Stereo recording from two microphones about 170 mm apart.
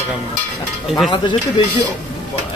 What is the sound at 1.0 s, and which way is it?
Speech, 25° left (ahead or behind).